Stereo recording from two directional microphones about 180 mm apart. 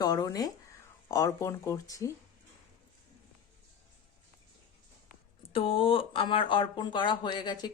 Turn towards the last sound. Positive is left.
turn(degrees=25)  # may be behind; listen again after turning